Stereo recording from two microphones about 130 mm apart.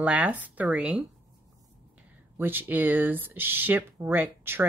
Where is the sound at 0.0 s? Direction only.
10° right (ahead or behind).